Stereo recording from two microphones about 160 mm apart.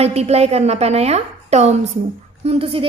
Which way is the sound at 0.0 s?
40° right (ahead or behind).